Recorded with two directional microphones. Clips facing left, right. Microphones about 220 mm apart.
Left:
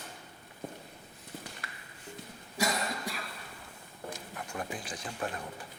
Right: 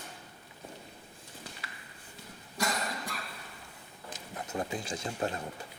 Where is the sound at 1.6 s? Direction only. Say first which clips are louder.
Left 1 dB; 50° left (ahead or behind).